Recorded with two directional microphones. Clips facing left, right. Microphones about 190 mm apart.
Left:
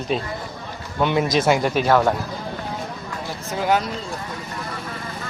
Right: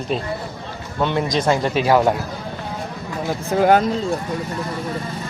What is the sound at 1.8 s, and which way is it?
Speech, 15° right (ahead or behind).